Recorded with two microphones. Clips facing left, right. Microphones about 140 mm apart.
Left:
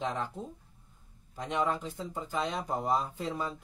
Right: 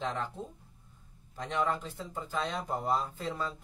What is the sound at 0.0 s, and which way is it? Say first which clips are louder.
Speech: left 1 dB; 15° left (ahead or behind).